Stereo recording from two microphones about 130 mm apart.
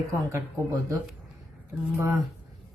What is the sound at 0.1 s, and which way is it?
Speech, 25° right (ahead or behind).